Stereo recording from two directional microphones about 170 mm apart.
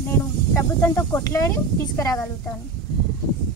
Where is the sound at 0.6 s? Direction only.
15° left (ahead or behind).